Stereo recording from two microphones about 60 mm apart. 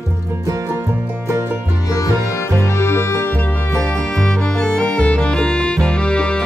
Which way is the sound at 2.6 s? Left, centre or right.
Left.